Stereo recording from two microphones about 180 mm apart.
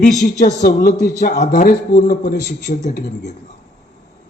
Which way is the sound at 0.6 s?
60° left (ahead or behind).